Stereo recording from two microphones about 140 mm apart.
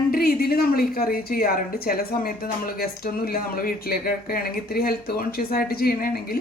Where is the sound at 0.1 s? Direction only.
90° left.